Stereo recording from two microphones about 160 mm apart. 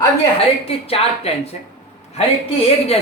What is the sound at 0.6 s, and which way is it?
Speech, 40° left (ahead or behind).